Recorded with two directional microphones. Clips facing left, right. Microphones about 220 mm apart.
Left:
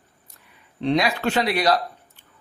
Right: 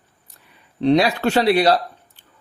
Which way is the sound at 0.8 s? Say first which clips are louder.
Right 5 dB; 35° right (ahead or behind).